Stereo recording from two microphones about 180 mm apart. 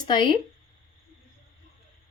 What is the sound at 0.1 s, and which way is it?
Speech, 25° left (ahead or behind).